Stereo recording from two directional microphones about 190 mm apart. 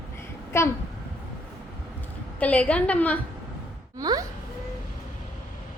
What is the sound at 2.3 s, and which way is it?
Speech, 5° left (ahead or behind).